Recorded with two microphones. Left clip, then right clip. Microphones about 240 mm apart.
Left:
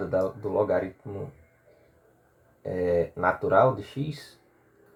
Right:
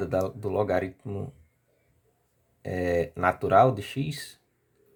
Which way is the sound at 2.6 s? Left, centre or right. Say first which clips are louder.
Left 2 dB; right.